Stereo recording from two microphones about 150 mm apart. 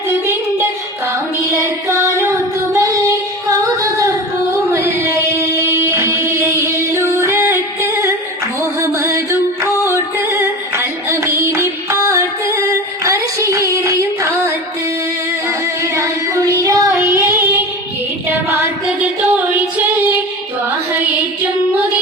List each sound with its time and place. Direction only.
0.1 s music: 15° right (ahead or behind)
2.7 s child singing: 20° right (ahead or behind)
3.6 s singing: 20° right (ahead or behind)
8.8 s music: 20° right (ahead or behind)
13.1 s child singing: 20° right (ahead or behind)
14.0 s music: 20° right (ahead or behind)
16.0 s music: 20° right (ahead or behind)
19.0 s singing: 10° right (ahead or behind)